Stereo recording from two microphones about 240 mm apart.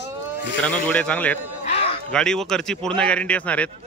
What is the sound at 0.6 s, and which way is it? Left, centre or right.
A man's voice, centre.